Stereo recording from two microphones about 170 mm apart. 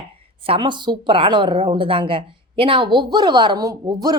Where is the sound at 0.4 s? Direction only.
30° right (ahead or behind).